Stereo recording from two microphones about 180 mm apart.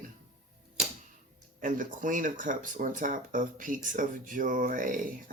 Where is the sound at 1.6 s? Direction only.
45° right (ahead or behind).